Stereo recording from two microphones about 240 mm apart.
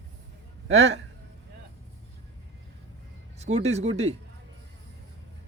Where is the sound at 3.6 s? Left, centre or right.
Right.